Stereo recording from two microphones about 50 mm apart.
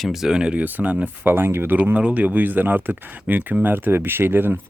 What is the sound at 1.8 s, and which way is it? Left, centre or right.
Speech, right.